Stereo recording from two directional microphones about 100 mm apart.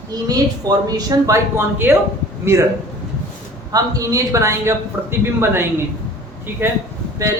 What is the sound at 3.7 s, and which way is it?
Speech, 35° right (ahead or behind).